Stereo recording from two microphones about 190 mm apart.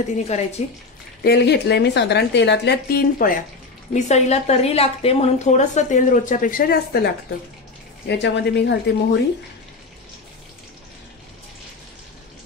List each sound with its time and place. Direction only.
0.3 s a woman's voice: 35° left (ahead or behind)
1.2 s a woman's voice: 60° left (ahead or behind)
3.9 s a woman's voice: 35° left (ahead or behind)
8.2 s a woman's voice: 65° left (ahead or behind)